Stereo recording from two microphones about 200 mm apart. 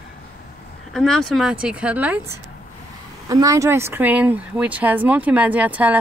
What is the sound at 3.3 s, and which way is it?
Speech, 15° right (ahead or behind).